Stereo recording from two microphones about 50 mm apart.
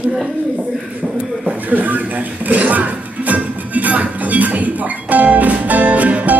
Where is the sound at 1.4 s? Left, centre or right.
Right.